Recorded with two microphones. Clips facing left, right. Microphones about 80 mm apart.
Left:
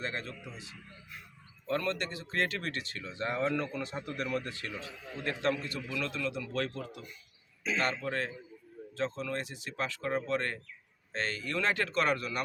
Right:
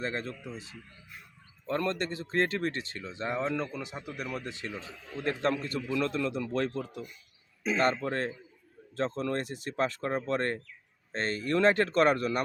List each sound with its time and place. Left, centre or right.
0.0 s a man's voice: right